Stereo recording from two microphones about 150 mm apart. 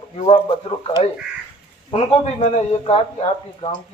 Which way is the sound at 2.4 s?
45° left (ahead or behind).